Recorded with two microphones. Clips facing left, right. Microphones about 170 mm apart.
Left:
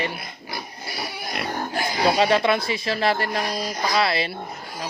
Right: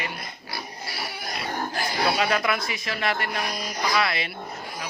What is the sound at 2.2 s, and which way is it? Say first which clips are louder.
Speech: left 5 dB; 30° left (ahead or behind).